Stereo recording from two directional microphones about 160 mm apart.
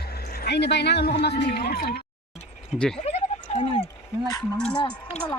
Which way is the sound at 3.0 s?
40° left (ahead or behind).